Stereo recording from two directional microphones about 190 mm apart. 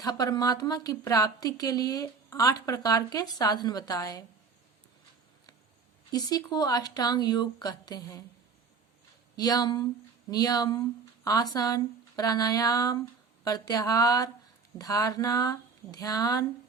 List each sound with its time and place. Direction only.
0.0 s a woman's voice: 20° left (ahead or behind)
6.1 s a woman's voice: 20° left (ahead or behind)
9.3 s a woman's voice: 20° left (ahead or behind)